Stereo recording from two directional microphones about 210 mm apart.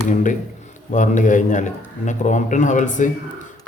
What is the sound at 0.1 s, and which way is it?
Speech, 35° left (ahead or behind).